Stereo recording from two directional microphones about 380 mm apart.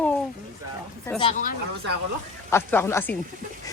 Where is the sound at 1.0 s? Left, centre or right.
Centre.